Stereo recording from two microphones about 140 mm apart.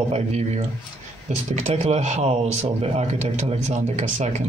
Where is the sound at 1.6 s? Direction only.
50° right (ahead or behind).